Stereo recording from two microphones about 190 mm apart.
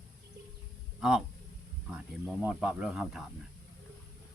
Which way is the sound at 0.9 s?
5° right (ahead or behind).